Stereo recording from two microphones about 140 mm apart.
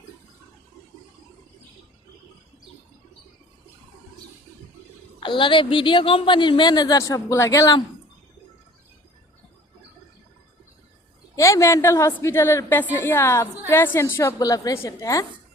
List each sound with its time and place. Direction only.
5.2 s a woman's voice: 35° left (ahead or behind)
11.3 s a woman's voice: 20° left (ahead or behind)